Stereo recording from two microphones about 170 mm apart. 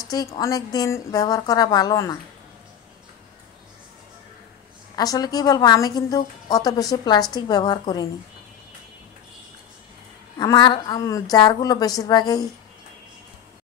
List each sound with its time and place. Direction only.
0.0 s a woman's voice: 20° left (ahead or behind)
4.9 s a woman's voice: 20° left (ahead or behind)
10.3 s a woman's voice: 25° left (ahead or behind)